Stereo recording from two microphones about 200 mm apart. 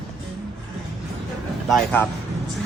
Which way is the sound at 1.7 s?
5° left (ahead or behind).